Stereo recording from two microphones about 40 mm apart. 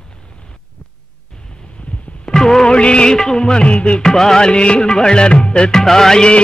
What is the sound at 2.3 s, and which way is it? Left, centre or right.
Music, centre.